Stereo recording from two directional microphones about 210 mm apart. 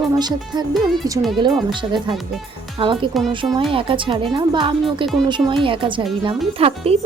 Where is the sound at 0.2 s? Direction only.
20° right (ahead or behind).